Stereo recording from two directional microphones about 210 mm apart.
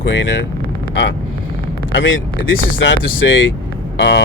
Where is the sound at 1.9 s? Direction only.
65° left (ahead or behind).